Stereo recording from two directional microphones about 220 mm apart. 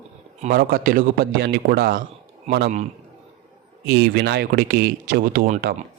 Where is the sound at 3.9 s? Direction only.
45° right (ahead or behind).